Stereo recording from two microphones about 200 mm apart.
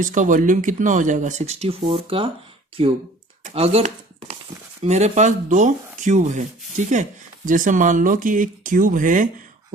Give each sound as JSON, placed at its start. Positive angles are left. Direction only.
{"t": 0.0, "sound": "speech", "side_deg": -40}